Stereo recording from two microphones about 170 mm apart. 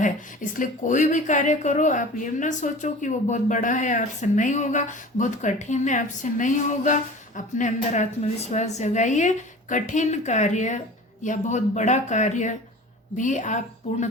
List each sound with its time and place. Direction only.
0.0 s speech: 50° left (ahead or behind)